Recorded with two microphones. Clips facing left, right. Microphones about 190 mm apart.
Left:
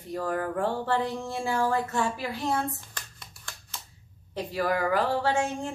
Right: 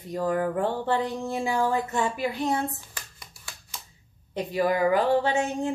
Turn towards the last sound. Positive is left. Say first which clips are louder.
# right 2 dB
turn(degrees=-20)  # may be behind; listen again after turning